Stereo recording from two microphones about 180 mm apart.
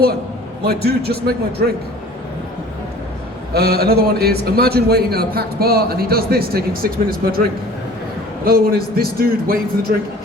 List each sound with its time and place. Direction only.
0.6 s a man's voice: 60° right (ahead or behind)
3.5 s a man's voice: 60° right (ahead or behind)
8.4 s a man's voice: 55° right (ahead or behind)